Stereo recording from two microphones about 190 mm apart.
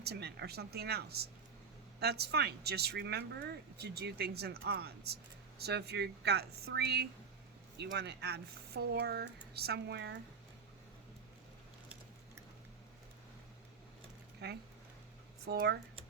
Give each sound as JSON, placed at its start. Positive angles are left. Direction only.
{"t": 0.0, "sound": "speech", "side_deg": -60}
{"t": 14.4, "sound": "speech", "side_deg": -55}